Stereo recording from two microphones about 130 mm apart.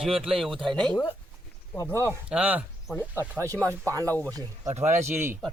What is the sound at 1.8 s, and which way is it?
Speech, 20° left (ahead or behind).